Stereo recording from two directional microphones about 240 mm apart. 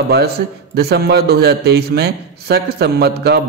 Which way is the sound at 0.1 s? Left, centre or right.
Right.